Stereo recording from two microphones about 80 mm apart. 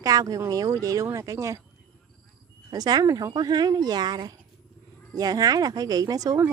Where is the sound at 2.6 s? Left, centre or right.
Right.